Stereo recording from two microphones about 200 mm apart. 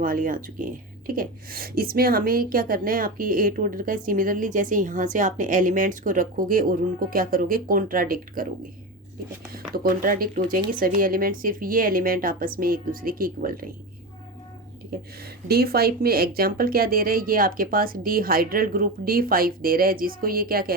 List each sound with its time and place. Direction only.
0.0 s speech: 45° right (ahead or behind)
9.5 s speech: 45° right (ahead or behind)
14.9 s speech: 50° right (ahead or behind)